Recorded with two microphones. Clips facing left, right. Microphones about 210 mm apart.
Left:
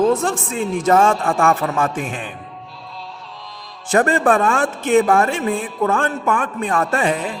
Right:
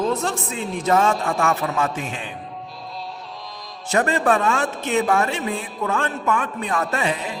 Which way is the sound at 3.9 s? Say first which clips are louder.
Left 4 dB; 50° left (ahead or behind).